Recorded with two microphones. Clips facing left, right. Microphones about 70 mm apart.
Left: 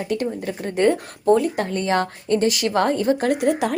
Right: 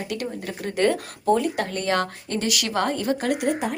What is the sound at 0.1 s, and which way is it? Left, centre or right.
Speech, left.